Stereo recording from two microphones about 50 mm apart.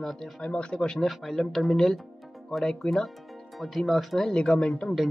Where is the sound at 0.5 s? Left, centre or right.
Left.